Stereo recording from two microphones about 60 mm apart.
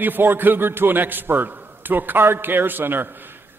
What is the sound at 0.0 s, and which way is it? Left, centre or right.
A man's voice, right.